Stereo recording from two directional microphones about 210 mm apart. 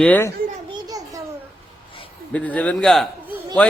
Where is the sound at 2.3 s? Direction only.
5° left (ahead or behind).